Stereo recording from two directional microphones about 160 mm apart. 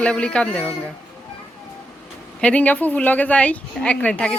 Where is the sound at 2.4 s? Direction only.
10° left (ahead or behind).